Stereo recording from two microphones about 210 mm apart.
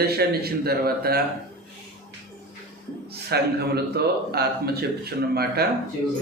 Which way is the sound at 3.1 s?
50° right (ahead or behind).